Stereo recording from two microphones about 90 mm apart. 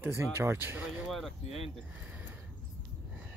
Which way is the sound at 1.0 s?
Centre (ahead or behind).